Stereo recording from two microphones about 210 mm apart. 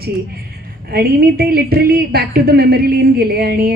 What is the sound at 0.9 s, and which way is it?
Speech, 45° right (ahead or behind).